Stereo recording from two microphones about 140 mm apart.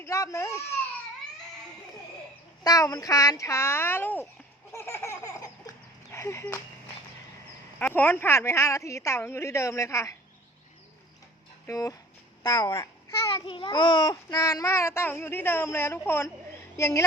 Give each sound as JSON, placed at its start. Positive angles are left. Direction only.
{"t": 0.0, "sound": "a child's voice", "side_deg": 20}
{"t": 2.6, "sound": "a child's voice", "side_deg": 25}
{"t": 4.7, "sound": "laughter", "side_deg": 20}
{"t": 7.8, "sound": "a child's voice", "side_deg": 15}
{"t": 11.6, "sound": "speech", "side_deg": 20}
{"t": 13.3, "sound": "a child's voice", "side_deg": 40}